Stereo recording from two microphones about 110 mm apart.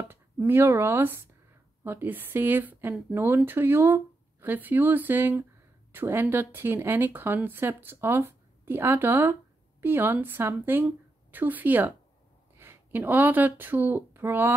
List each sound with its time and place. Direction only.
0.1 s speech: 20° right (ahead or behind)